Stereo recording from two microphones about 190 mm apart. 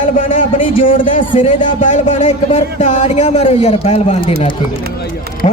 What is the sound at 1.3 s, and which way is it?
Speech, 30° left (ahead or behind).